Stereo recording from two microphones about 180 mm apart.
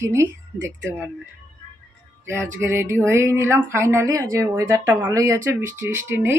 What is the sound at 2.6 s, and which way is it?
A woman's voice, 15° right (ahead or behind).